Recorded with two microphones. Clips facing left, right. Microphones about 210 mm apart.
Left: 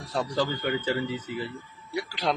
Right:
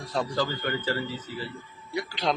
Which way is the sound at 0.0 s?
10° left (ahead or behind).